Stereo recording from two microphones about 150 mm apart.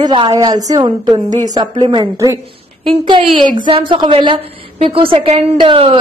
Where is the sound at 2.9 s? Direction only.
35° right (ahead or behind).